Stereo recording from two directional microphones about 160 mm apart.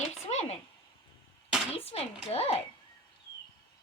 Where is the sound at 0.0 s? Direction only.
45° left (ahead or behind).